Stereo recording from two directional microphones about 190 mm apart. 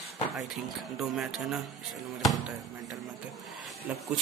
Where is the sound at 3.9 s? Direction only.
5° right (ahead or behind).